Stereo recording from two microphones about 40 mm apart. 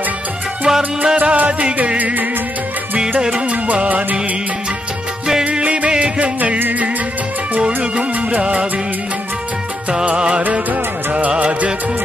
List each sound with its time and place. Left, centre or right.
0.7 s music: centre
1.1 s music: right
3.2 s music: right
5.4 s music: right
7.6 s music: right
10.0 s music: right
10.5 s music: right